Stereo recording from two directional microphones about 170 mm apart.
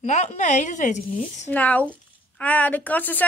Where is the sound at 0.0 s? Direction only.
40° left (ahead or behind).